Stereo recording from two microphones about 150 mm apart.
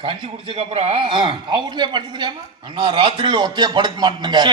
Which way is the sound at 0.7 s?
40° right (ahead or behind).